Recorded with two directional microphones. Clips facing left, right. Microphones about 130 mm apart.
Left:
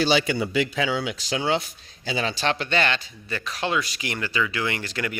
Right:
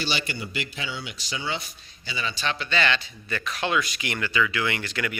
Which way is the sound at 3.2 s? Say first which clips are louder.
Left 1 dB; 30° left (ahead or behind).